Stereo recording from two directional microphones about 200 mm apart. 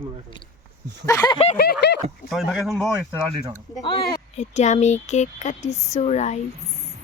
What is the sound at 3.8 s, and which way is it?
Speech, 25° left (ahead or behind).